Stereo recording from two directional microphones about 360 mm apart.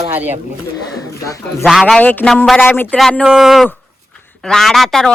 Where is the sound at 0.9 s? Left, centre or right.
Centre.